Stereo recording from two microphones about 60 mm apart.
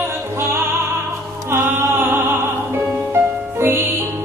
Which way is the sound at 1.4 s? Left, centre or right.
Right.